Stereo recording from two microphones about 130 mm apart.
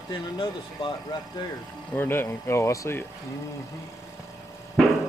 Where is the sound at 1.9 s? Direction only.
15° left (ahead or behind).